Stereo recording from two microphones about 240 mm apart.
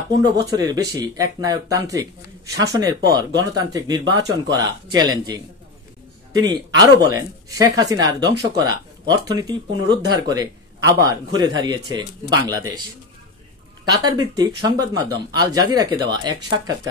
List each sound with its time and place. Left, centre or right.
0.2 s speech: centre
13.8 s speech: centre